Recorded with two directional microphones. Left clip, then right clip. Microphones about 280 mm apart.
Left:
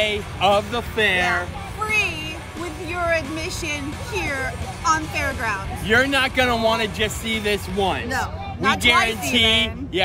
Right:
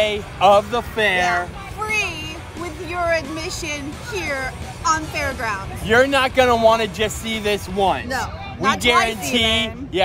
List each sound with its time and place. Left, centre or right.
0.0 s speech: centre
1.9 s a sound: centre
2.6 s music: centre
3.3 s speech: centre
5.9 s speech: centre
8.6 s speech: centre